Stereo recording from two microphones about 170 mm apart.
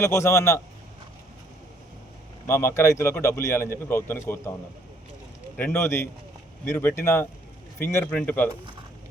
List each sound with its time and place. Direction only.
0.0 s speech: 15° left (ahead or behind)
2.5 s speech: 15° left (ahead or behind)
5.5 s speech: 10° left (ahead or behind)